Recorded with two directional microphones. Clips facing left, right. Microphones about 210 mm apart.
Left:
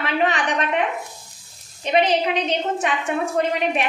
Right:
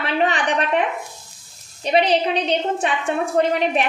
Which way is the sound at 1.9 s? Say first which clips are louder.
Right 1 dB; 35° right (ahead or behind).